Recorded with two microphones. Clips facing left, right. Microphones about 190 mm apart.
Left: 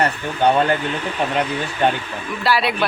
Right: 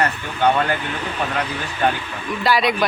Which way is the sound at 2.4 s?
5° left (ahead or behind).